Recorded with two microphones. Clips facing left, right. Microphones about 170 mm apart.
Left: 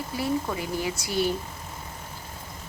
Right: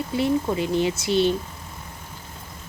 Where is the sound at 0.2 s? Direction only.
25° right (ahead or behind).